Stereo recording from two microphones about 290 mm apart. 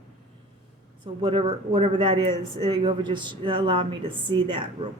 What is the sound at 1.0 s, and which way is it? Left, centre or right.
Speech, centre.